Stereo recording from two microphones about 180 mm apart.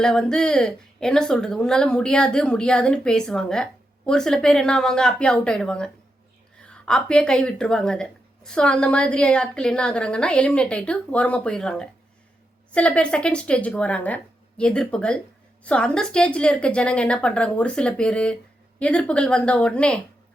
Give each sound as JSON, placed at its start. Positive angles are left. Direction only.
{"t": 0.0, "sound": "a woman's voice", "side_deg": 5}